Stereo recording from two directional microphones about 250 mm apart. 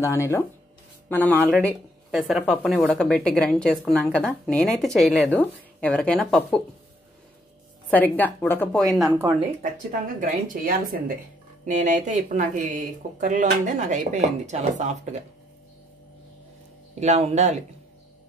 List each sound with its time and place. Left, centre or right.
0.0 s a woman's voice: centre
7.9 s a woman's voice: centre
10.2 s speech: right
17.0 s speech: right